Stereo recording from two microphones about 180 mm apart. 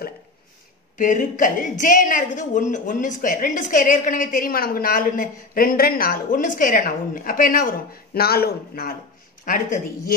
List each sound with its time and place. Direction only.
0.9 s a woman's voice: 45° left (ahead or behind)